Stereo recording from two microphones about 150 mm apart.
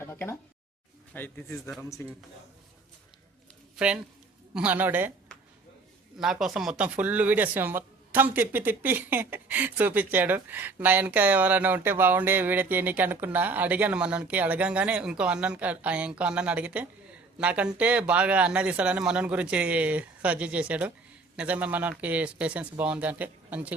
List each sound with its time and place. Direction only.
0.0 s a sound: 15° left (ahead or behind)
1.1 s speech: 15° left (ahead or behind)
3.8 s speech: 5° right (ahead or behind)
6.1 s speech: 5° right (ahead or behind)